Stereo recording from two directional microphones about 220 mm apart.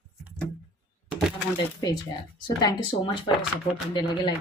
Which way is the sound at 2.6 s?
20° left (ahead or behind).